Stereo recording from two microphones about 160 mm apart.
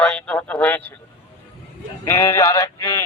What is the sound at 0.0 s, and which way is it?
Speech, 5° left (ahead or behind).